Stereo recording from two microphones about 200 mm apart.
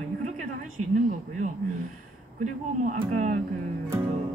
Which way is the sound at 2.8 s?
35° right (ahead or behind).